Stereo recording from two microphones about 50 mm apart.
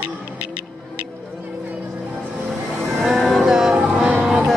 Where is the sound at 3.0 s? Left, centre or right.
Centre.